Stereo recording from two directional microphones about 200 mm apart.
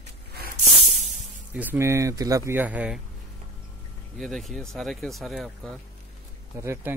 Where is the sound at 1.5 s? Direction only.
10° right (ahead or behind).